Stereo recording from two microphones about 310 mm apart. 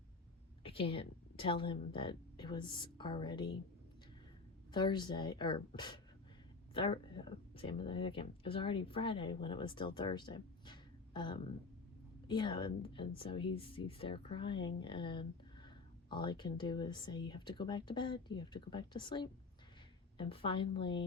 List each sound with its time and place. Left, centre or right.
0.6 s a woman's voice: centre
4.7 s speech: centre